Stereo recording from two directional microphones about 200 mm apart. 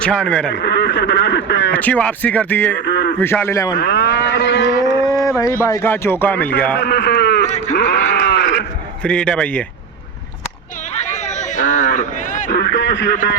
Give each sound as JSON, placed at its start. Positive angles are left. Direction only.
{"t": 0.0, "sound": "a man's voice", "side_deg": 5}
{"t": 0.5, "sound": "speech", "side_deg": 60}
{"t": 1.7, "sound": "speech", "side_deg": 5}
{"t": 2.8, "sound": "a man's voice", "side_deg": 60}
{"t": 3.2, "sound": "speech", "side_deg": 10}
{"t": 3.8, "sound": "speech", "side_deg": 55}
{"t": 5.1, "sound": "a sound", "side_deg": 15}
{"t": 5.6, "sound": "speech", "side_deg": 15}
{"t": 6.7, "sound": "a man's voice", "side_deg": 60}
{"t": 7.4, "sound": "speech", "side_deg": 35}
{"t": 7.8, "sound": "a sound", "side_deg": 60}
{"t": 9.0, "sound": "a man's voice", "side_deg": 5}
{"t": 11.1, "sound": "a sound", "side_deg": 35}
{"t": 12.5, "sound": "speech", "side_deg": 60}